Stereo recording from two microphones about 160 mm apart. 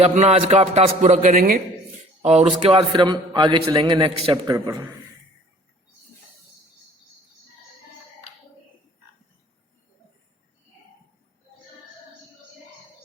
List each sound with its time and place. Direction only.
0.0 s a man's voice: 40° right (ahead or behind); by 1.5 s 60° right (ahead or behind)
2.2 s a man's voice: 40° right (ahead or behind)
2.9 s a man's voice: 30° right (ahead or behind)